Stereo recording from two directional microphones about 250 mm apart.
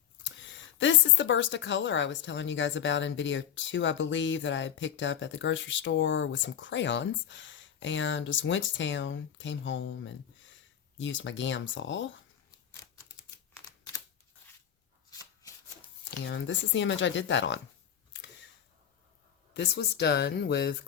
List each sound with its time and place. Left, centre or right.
0.8 s a woman's voice: left
16.0 s a woman's voice: left
19.5 s speech: left